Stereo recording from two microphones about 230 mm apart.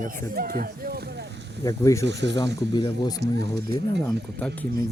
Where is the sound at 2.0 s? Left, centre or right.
Right.